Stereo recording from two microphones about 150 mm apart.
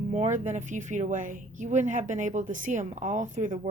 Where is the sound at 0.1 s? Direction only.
55° right (ahead or behind).